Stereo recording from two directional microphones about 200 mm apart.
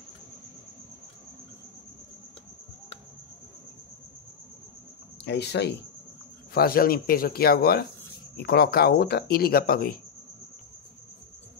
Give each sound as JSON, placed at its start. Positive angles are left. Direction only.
{"t": 5.2, "sound": "speech", "side_deg": 55}